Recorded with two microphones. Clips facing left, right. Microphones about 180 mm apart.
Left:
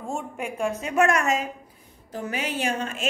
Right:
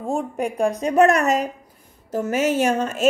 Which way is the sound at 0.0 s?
35° right (ahead or behind).